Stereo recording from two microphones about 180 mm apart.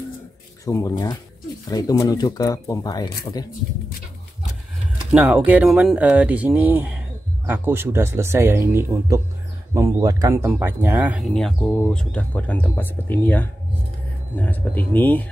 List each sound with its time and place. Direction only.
0.7 s speech: 15° left (ahead or behind)
5.1 s speech: 5° right (ahead or behind); by 15.2 s 10° left (ahead or behind)